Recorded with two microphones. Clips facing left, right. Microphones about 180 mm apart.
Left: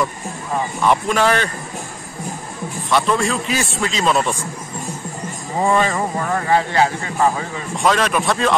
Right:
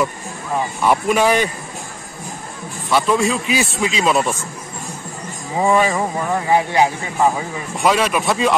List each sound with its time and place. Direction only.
0.8 s speech: 10° right (ahead or behind)
2.9 s a man's voice: 5° right (ahead or behind)
5.6 s speech: 10° right (ahead or behind)